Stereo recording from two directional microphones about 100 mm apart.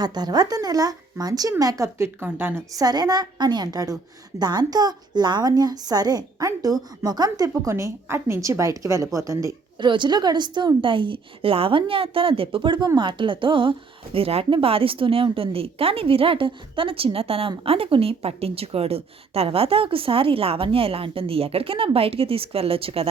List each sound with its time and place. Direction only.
0.0 s a woman's voice: 45° right (ahead or behind); by 2.6 s 25° right (ahead or behind)
2.7 s a woman's voice: 40° right (ahead or behind)
9.8 s a woman's voice: 50° right (ahead or behind); by 23.0 s 70° right (ahead or behind)